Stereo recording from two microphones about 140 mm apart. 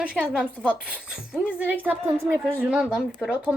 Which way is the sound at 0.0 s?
5° right (ahead or behind).